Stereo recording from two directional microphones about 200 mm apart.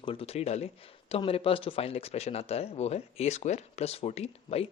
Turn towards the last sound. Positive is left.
turn(degrees=30)  # may be behind; listen again after turning